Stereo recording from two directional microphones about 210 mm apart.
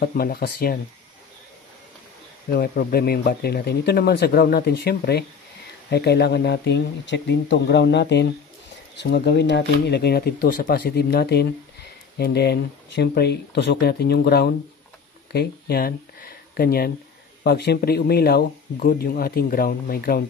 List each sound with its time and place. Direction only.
0.0 s speech: 45° left (ahead or behind)
2.5 s speech: 45° left (ahead or behind)